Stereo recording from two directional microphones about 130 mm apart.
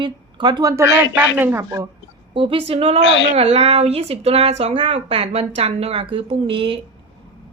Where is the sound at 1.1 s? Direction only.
15° right (ahead or behind).